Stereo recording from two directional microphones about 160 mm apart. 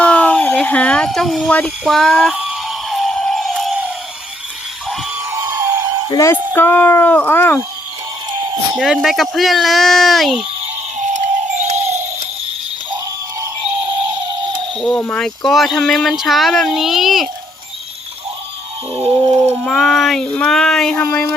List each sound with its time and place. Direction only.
0.0 s a sound: 10° left (ahead or behind)
5.3 s emergency vehicle: 20° right (ahead or behind)
6.1 s speech: 20° left (ahead or behind)
8.7 s speech: centre (ahead or behind)
11.0 s music: 50° right (ahead or behind)
14.8 s speech: 5° left (ahead or behind)
19.6 s speech: centre (ahead or behind)